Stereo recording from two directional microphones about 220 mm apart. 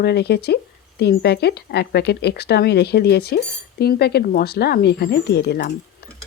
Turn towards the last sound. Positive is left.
turn(degrees=50)  # may be behind; listen again after turning